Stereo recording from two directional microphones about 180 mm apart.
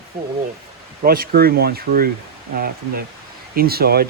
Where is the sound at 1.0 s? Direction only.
55° right (ahead or behind).